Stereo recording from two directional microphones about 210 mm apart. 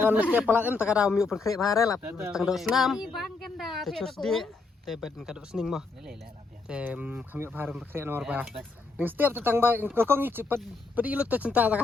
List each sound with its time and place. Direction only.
0.0 s speech: 5° right (ahead or behind)
1.5 s speech: 15° left (ahead or behind)
2.0 s speech: 10° right (ahead or behind)